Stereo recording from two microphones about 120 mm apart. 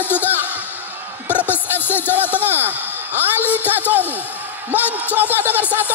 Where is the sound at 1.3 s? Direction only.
15° left (ahead or behind).